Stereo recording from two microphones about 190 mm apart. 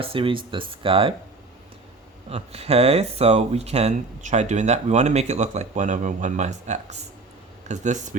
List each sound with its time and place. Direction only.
0.0 s speech: 30° right (ahead or behind)
2.3 s speech: 35° right (ahead or behind)